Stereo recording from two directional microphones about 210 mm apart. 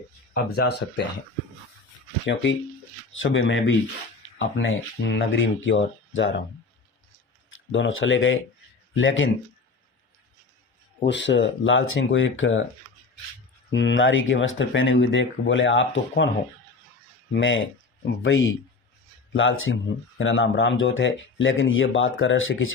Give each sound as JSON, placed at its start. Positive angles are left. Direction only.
{"t": 0.5, "sound": "speech", "side_deg": 55}
{"t": 2.2, "sound": "speech", "side_deg": 60}
{"t": 7.5, "sound": "speech", "side_deg": 65}
{"t": 11.0, "sound": "speech", "side_deg": 60}
{"t": 13.7, "sound": "speech", "side_deg": 60}
{"t": 17.3, "sound": "speech", "side_deg": 60}